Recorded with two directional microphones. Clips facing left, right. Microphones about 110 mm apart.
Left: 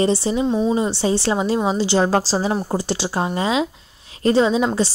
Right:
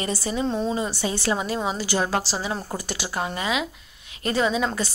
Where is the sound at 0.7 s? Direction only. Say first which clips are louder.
Left 7 dB; 25° left (ahead or behind).